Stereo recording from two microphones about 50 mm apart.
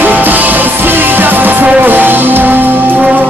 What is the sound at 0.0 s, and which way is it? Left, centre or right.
Music, right.